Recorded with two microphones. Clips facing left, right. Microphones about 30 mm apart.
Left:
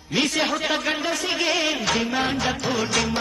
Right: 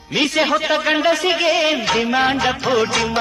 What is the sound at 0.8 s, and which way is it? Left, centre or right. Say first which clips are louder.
Music: right 8 dB; right.